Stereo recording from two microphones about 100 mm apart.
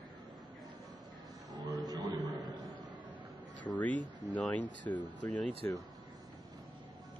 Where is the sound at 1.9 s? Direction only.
40° right (ahead or behind).